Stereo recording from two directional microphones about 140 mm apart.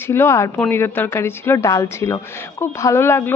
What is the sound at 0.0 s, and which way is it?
Speech, 15° left (ahead or behind).